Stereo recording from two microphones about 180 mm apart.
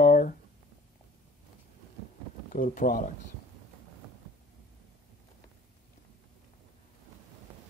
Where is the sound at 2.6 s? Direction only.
50° left (ahead or behind).